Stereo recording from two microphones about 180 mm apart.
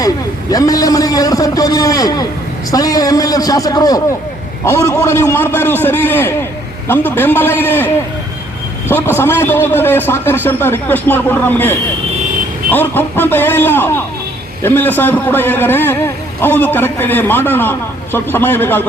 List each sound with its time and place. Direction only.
0.5 s a man's voice: 20° left (ahead or behind)
8.9 s a man's voice: 10° left (ahead or behind)